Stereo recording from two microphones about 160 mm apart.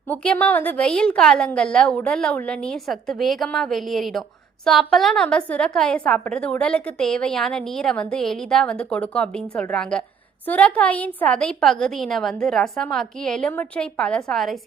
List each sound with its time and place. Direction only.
0.1 s a woman's voice: 10° left (ahead or behind)